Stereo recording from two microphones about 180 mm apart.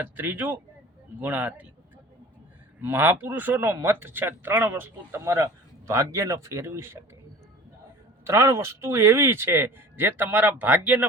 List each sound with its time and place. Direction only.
0.0 s speech: 10° right (ahead or behind)
2.8 s speech: 10° right (ahead or behind)
8.3 s speech: 15° right (ahead or behind)